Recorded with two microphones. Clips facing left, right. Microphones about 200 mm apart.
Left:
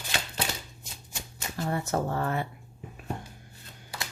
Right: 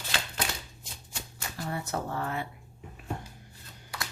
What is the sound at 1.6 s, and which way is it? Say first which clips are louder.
Speech: left 5 dB; 45° left (ahead or behind).